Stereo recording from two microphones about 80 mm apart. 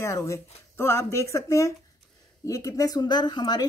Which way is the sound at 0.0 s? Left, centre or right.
Left.